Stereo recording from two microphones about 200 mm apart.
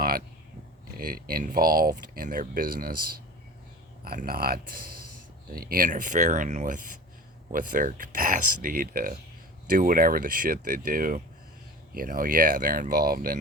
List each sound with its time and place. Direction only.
0.9 s speech: 45° right (ahead or behind)